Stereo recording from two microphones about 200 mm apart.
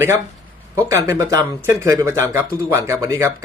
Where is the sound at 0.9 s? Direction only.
15° right (ahead or behind).